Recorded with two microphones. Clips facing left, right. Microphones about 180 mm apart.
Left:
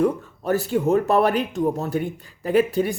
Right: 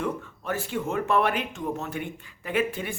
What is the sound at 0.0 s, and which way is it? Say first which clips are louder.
Speech: left 9 dB; 40° left (ahead or behind).